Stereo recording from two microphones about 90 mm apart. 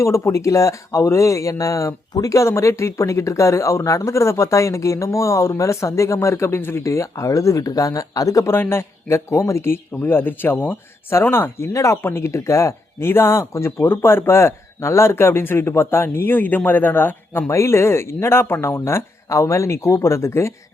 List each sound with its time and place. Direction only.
0.0 s speech: 35° left (ahead or behind)